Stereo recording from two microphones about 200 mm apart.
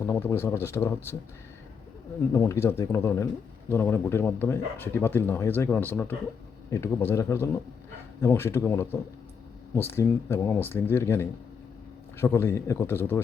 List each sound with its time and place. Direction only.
0.0 s speech: 15° left (ahead or behind)
2.3 s speech: 15° left (ahead or behind)